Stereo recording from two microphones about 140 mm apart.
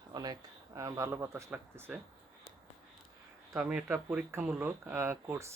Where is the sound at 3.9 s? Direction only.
20° right (ahead or behind).